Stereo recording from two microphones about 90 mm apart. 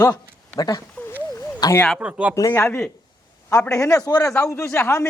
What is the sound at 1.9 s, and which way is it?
Speech, 15° right (ahead or behind).